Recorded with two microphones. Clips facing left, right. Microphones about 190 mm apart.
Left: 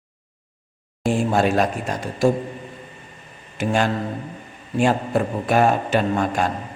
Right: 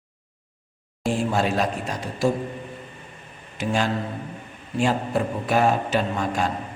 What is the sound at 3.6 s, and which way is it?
Speech, 50° left (ahead or behind).